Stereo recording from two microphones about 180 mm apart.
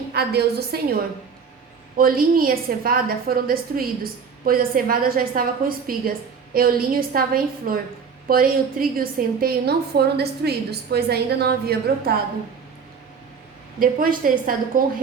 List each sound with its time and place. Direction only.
0.1 s a woman's voice: 65° right (ahead or behind)
2.0 s a woman's voice: 55° right (ahead or behind)
13.7 s a woman's voice: 50° right (ahead or behind)